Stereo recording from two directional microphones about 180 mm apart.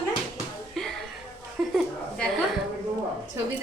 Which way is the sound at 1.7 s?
Centre (ahead or behind).